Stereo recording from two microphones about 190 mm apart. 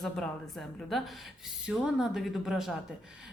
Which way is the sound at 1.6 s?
Centre (ahead or behind).